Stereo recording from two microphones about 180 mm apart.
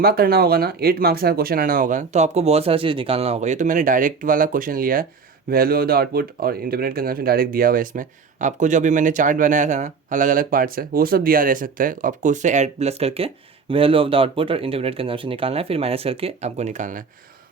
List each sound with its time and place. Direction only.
0.0 s speech: 60° right (ahead or behind)